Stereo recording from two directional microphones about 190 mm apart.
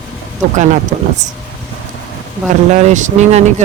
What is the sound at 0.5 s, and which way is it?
Speech, 40° right (ahead or behind).